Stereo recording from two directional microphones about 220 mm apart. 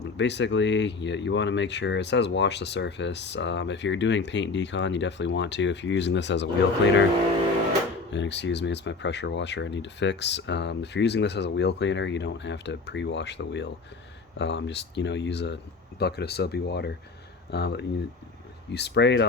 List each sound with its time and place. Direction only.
0.0 s speech: 50° left (ahead or behind)
8.1 s speech: 55° left (ahead or behind)